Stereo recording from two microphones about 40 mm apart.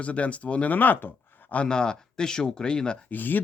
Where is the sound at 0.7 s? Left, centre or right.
Left.